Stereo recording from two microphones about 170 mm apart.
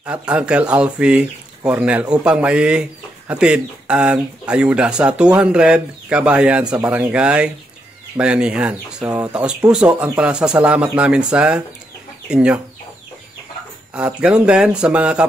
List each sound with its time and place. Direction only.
0.0 s speech: 5° right (ahead or behind)
13.9 s speech: 5° right (ahead or behind)